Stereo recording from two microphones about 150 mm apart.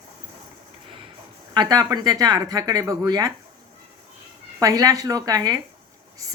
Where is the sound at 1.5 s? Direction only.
25° right (ahead or behind).